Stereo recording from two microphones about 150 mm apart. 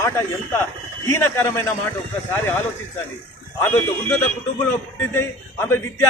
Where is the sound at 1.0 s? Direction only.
20° left (ahead or behind).